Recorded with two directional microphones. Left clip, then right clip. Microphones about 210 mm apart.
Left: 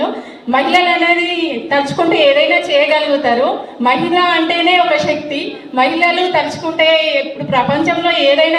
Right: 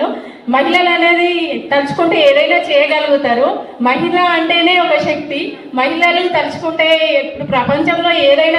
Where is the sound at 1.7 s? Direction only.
50° left (ahead or behind).